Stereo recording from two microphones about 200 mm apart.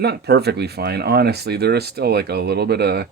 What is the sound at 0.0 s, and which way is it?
Speech, 55° right (ahead or behind).